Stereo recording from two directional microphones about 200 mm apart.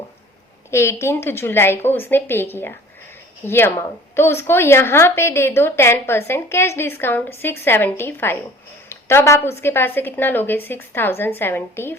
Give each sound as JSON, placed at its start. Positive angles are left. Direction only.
{"t": 0.7, "sound": "a woman's voice", "side_deg": 15}